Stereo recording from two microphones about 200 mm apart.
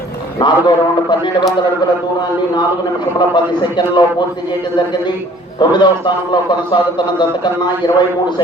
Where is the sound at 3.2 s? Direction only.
20° left (ahead or behind).